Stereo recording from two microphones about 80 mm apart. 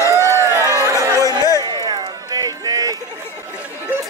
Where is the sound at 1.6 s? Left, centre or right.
Right.